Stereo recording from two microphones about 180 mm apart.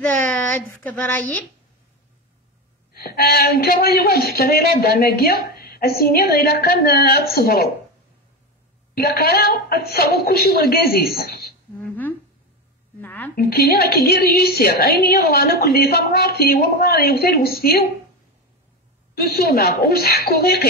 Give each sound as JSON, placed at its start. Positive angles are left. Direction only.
{"t": 0.0, "sound": "speech", "side_deg": 10}
{"t": 2.9, "sound": "a man's voice", "side_deg": 55}
{"t": 8.9, "sound": "a man's voice", "side_deg": 60}
{"t": 11.9, "sound": "a sound", "side_deg": 10}
{"t": 13.4, "sound": "a man's voice", "side_deg": 60}
{"t": 19.1, "sound": "a man's voice", "side_deg": 60}